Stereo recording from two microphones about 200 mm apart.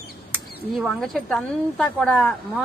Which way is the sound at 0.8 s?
5° left (ahead or behind).